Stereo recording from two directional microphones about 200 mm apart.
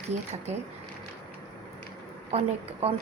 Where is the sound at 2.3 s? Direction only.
30° right (ahead or behind).